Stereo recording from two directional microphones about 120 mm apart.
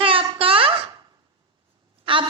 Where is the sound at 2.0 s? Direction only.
45° right (ahead or behind).